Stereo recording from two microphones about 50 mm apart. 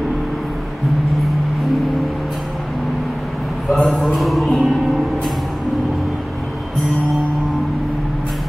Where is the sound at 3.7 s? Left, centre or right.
Left.